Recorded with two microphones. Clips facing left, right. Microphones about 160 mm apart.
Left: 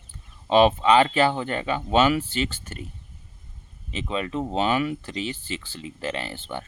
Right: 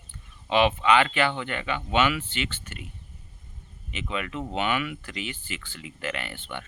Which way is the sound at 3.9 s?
30° left (ahead or behind).